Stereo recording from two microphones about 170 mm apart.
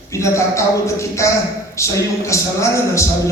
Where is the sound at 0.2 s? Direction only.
15° left (ahead or behind).